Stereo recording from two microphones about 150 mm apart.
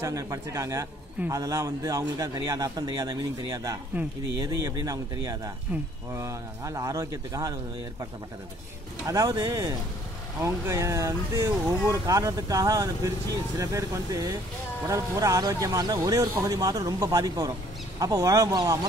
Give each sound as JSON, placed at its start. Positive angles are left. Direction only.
{"t": 0.0, "sound": "a man's voice", "side_deg": -20}
{"t": 9.0, "sound": "a man's voice", "side_deg": -25}